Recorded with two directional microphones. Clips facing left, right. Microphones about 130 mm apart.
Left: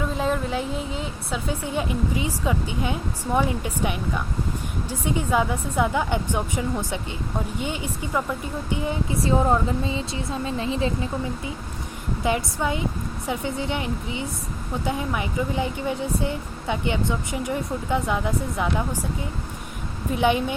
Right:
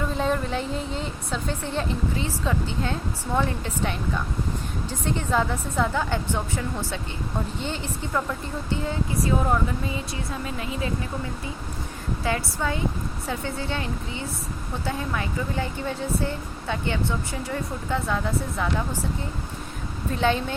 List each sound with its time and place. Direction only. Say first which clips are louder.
0.0 s speech: left 1 dB; 5° left (ahead or behind); by 11.1 s 25° left (ahead or behind)
12.2 s speech: left 3 dB; 20° left (ahead or behind)
20.1 s speech: left 2 dB; 15° left (ahead or behind)